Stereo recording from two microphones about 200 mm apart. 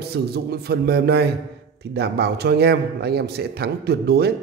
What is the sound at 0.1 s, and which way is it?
A man's voice, 55° right (ahead or behind).